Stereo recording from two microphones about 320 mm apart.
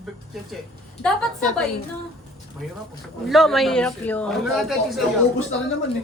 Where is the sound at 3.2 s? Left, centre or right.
Centre.